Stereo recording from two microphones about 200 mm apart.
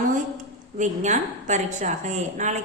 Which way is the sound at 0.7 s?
40° right (ahead or behind).